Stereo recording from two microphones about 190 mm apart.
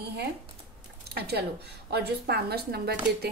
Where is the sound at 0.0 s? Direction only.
60° right (ahead or behind).